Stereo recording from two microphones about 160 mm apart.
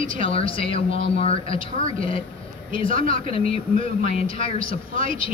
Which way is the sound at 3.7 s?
55° right (ahead or behind).